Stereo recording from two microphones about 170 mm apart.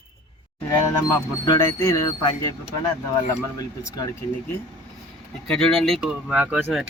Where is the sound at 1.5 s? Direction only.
15° left (ahead or behind).